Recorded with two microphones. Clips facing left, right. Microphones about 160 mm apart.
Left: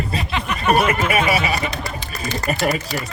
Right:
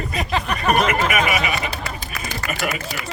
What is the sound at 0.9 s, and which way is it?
Speech, 30° left (ahead or behind).